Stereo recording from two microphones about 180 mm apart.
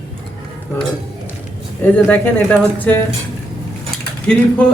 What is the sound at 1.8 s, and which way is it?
Speech, 10° left (ahead or behind).